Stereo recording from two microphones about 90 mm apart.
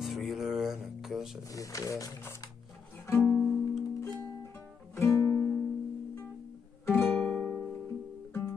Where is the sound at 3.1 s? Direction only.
25° left (ahead or behind).